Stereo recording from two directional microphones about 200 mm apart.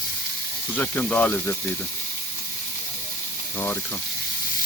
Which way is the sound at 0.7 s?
5° left (ahead or behind).